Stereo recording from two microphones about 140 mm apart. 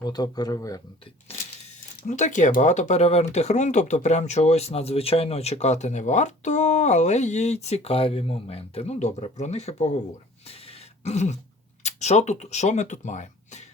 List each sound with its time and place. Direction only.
0.0 s speech: 30° left (ahead or behind)
2.0 s speech: 60° left (ahead or behind)
10.5 s a sound: 45° left (ahead or behind)
11.8 s speech: 55° left (ahead or behind)